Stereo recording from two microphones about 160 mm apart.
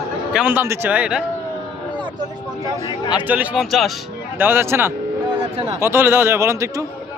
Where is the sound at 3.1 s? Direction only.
10° right (ahead or behind).